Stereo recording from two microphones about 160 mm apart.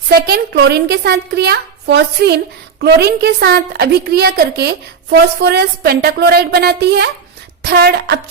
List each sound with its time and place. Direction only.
0.1 s a woman's voice: 80° right